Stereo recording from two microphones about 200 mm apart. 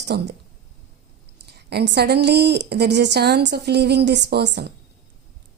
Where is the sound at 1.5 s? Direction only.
55° right (ahead or behind).